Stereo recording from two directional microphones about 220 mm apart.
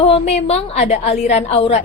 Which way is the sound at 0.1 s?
30° left (ahead or behind).